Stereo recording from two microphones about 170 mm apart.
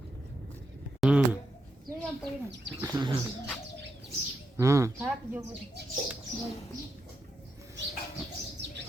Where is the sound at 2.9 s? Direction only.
25° right (ahead or behind).